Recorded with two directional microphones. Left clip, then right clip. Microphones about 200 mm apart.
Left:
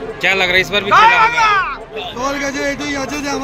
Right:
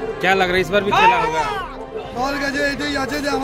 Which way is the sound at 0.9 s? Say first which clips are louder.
Left 5 dB; 15° right (ahead or behind).